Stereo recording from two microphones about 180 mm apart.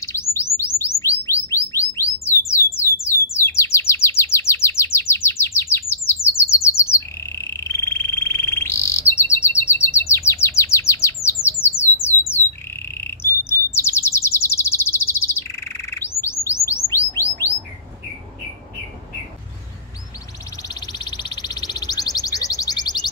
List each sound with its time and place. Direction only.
0.3 s bird: 15° left (ahead or behind)
3.3 s chirp: 15° left (ahead or behind)
11.4 s bird: 15° left (ahead or behind)
20.6 s a sound: 20° left (ahead or behind)